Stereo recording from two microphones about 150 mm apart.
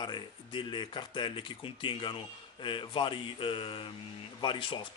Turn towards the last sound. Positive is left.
turn(degrees=35)  # may be behind; listen again after turning